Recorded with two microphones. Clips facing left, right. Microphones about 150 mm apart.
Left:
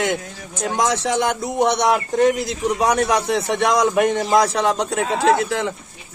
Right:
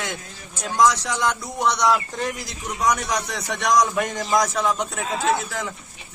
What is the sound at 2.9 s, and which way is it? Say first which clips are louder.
A man's voice: left 8 dB; 65° left (ahead or behind).